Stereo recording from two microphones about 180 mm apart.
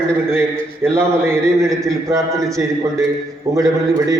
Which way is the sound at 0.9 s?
15° right (ahead or behind).